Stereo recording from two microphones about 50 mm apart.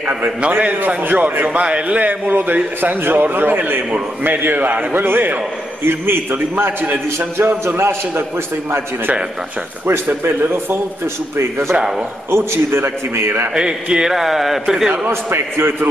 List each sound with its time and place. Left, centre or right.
0.0 s a man's voice: right
11.3 s a man's voice: right
13.6 s a man's voice: centre
15.0 s a man's voice: right